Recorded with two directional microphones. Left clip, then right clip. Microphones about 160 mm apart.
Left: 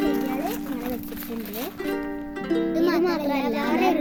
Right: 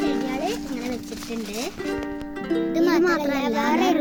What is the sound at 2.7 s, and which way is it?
Music, 90° right.